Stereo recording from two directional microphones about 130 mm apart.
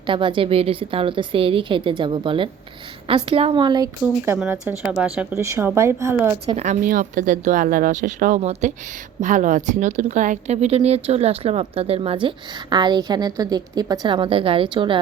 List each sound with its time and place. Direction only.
0.1 s a woman's voice: 40° right (ahead or behind)
4.4 s speech: 5° right (ahead or behind)
5.3 s speech: 20° right (ahead or behind)
6.6 s speech: 75° right (ahead or behind); by 8.7 s 60° right (ahead or behind)
9.2 s a woman's voice: 80° right; by 14.9 s 40° right (ahead or behind)